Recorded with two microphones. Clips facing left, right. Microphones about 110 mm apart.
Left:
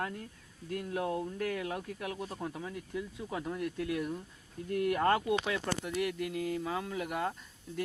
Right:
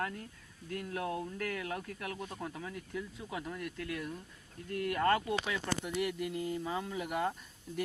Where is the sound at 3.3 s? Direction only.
Centre (ahead or behind).